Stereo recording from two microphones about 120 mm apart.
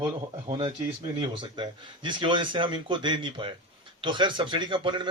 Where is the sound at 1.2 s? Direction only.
40° right (ahead or behind).